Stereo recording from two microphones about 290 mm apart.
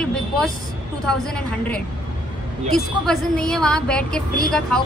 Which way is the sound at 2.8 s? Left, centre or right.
Centre.